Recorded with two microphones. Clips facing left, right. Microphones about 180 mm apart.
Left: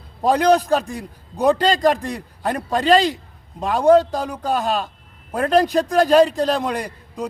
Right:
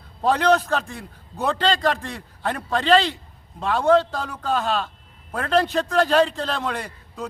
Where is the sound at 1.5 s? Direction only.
40° left (ahead or behind).